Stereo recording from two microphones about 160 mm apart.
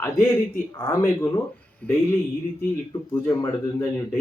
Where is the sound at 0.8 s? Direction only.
15° left (ahead or behind).